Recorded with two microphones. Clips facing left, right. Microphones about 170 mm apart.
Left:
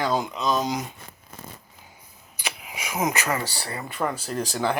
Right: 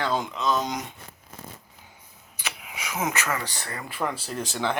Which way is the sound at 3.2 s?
35° left (ahead or behind).